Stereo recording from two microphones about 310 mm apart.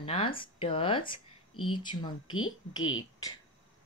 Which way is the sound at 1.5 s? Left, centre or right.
Left.